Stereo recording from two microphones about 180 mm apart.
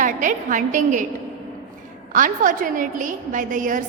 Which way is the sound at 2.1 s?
45° right (ahead or behind).